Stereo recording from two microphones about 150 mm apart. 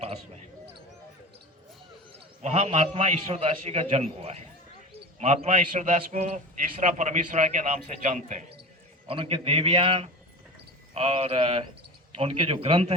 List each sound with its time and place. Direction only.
2.4 s a man's voice: 45° right (ahead or behind)
9.0 s a man's voice: 35° right (ahead or behind)